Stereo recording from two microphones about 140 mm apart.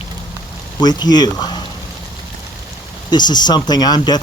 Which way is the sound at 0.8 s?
30° left (ahead or behind).